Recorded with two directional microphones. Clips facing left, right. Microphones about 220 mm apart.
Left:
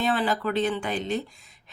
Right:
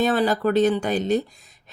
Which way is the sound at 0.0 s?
40° right (ahead or behind).